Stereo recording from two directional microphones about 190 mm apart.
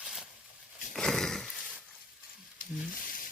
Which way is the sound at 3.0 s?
45° left (ahead or behind).